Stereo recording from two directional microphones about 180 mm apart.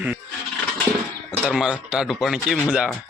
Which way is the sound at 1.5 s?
5° right (ahead or behind).